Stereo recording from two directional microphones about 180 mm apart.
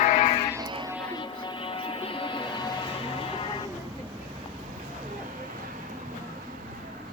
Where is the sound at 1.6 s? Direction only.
30° left (ahead or behind).